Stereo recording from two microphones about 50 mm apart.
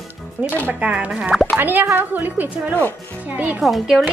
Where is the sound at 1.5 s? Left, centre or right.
Right.